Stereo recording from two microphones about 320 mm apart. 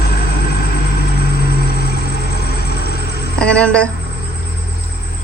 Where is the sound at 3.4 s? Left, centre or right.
Centre.